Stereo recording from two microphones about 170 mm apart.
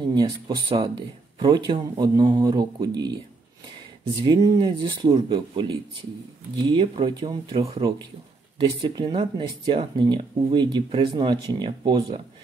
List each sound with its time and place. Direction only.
0.0 s speech: 25° right (ahead or behind)
4.2 s speech: 25° right (ahead or behind)